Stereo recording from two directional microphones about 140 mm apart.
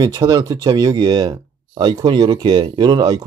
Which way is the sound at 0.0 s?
30° right (ahead or behind).